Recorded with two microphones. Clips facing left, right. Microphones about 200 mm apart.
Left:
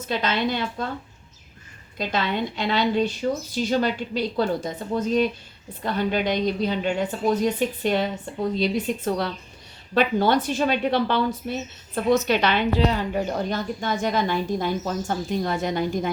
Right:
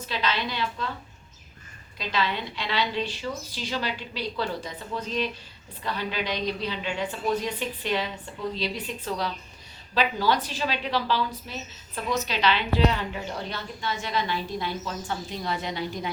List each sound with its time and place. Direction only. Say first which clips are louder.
0.1 s a woman's voice: left 5 dB; 45° left (ahead or behind)
2.0 s a woman's voice: left 4 dB; 45° left (ahead or behind)